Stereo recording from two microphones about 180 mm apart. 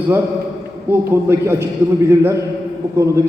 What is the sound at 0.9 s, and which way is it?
A man's voice, 15° right (ahead or behind).